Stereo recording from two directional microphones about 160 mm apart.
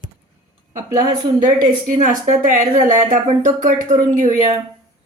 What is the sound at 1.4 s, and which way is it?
Speech, 55° right (ahead or behind).